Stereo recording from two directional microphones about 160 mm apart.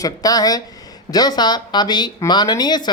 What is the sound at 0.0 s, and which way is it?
Speech, 25° left (ahead or behind).